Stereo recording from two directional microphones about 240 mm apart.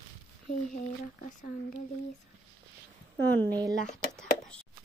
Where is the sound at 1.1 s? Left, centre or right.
Left.